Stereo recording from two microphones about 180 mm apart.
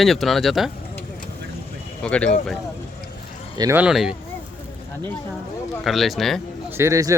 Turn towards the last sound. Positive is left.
turn(degrees=-15)  # may be behind; listen again after turning